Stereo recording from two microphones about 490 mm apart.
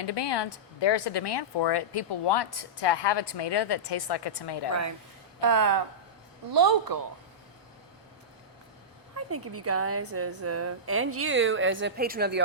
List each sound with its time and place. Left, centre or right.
0.0 s speech: left
4.7 s speech: right
9.1 s a woman's voice: right